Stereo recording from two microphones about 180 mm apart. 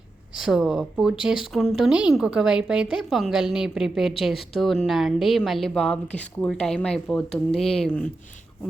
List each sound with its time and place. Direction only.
0.3 s speech: 5° right (ahead or behind)